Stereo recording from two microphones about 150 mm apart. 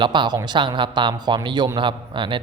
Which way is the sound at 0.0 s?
30° right (ahead or behind).